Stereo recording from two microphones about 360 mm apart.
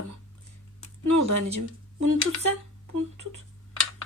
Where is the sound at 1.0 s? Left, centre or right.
Right.